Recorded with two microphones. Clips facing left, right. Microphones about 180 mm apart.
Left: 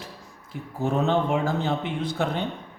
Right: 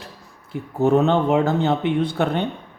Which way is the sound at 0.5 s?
65° right (ahead or behind).